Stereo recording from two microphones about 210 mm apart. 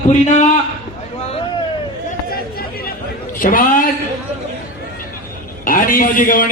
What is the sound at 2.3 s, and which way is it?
Chatter, 45° left (ahead or behind).